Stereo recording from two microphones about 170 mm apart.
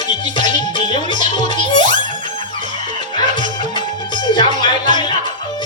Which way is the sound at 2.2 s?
30° left (ahead or behind).